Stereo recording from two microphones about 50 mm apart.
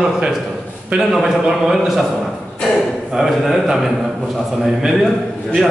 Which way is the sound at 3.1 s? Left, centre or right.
Centre.